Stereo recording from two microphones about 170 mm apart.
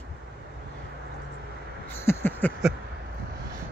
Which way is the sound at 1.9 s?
15° left (ahead or behind).